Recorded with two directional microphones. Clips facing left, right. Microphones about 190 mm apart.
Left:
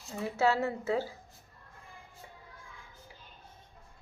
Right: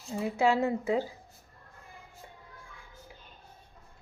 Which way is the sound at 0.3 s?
15° right (ahead or behind).